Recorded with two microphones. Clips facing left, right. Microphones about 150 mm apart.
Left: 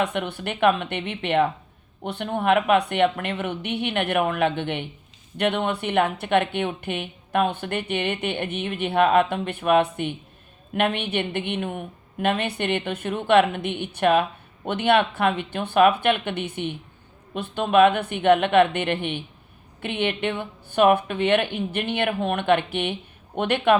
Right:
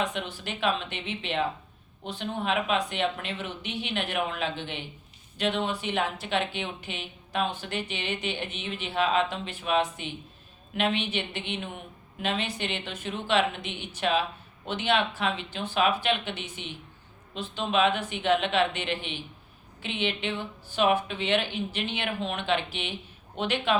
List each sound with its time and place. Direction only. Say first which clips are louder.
0.0 s speech: left 6 dB; 60° left (ahead or behind)